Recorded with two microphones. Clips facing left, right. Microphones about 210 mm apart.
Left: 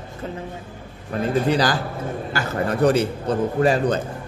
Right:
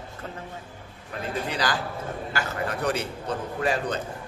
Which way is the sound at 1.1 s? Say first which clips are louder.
Left 10 dB; 45° left (ahead or behind).